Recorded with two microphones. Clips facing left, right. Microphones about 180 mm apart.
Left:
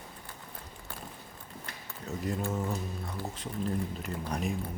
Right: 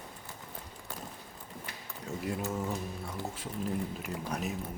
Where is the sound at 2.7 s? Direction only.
10° right (ahead or behind).